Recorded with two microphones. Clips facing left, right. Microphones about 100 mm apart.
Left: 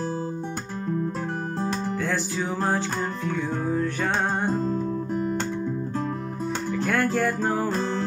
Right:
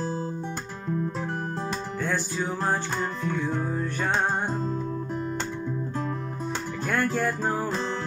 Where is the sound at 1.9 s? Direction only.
90° left.